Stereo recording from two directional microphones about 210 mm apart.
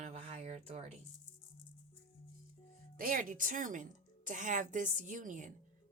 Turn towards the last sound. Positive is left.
turn(degrees=-40)  # may be behind; listen again after turning